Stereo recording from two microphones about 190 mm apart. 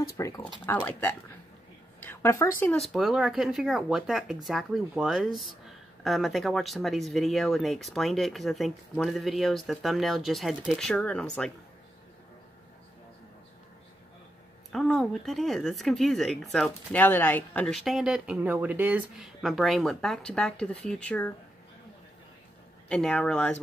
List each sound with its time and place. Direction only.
0.0 s speech: 15° left (ahead or behind)
2.8 s speech: centre (ahead or behind)
14.7 s speech: centre (ahead or behind)
22.8 s speech: 5° left (ahead or behind)